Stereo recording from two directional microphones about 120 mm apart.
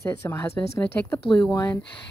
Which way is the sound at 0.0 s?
20° left (ahead or behind).